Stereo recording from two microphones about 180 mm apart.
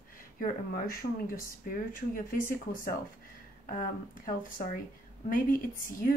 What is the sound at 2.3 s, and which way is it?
Speech, 50° left (ahead or behind).